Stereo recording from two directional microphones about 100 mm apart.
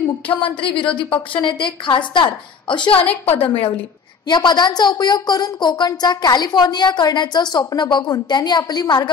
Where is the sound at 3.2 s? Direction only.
80° left.